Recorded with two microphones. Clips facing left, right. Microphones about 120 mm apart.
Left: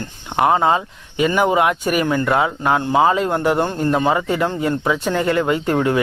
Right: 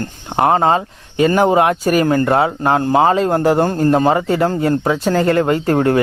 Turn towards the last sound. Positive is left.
turn(degrees=-40)  # may be behind; listen again after turning